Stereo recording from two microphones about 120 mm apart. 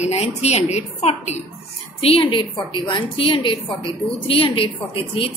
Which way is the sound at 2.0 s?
50° left (ahead or behind).